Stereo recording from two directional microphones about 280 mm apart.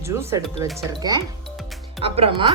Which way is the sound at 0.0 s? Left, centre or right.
Centre.